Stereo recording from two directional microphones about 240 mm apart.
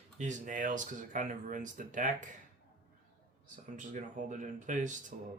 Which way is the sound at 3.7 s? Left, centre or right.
Right.